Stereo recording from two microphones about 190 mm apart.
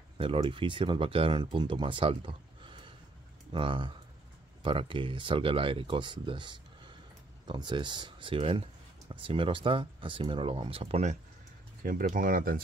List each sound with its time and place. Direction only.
0.2 s speech: 30° right (ahead or behind)
11.8 s speech: 45° right (ahead or behind)